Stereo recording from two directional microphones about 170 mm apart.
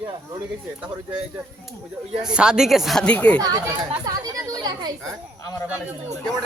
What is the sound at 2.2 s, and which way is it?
Speech, 5° right (ahead or behind).